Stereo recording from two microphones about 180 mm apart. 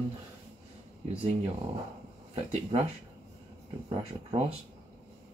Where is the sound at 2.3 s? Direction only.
35° right (ahead or behind).